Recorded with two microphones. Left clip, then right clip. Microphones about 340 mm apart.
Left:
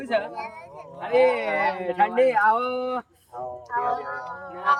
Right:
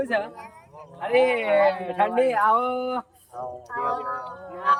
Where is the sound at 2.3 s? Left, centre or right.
Centre.